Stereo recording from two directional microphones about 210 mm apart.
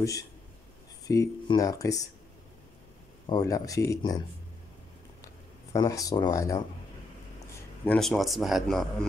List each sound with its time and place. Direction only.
1.0 s speech: 15° left (ahead or behind)
3.3 s speech: 15° left (ahead or behind)
5.7 s a man's voice: 15° left (ahead or behind); by 8.8 s centre (ahead or behind)